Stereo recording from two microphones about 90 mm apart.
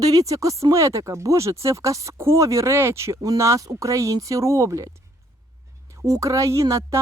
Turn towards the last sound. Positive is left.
turn(degrees=-35)  # may be behind; listen again after turning